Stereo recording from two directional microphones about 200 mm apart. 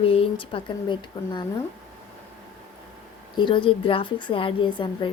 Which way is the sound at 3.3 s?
25° left (ahead or behind).